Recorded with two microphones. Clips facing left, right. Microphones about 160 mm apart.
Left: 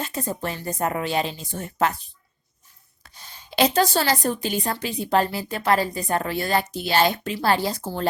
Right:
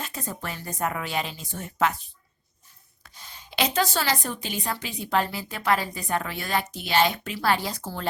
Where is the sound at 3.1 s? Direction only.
35° left (ahead or behind).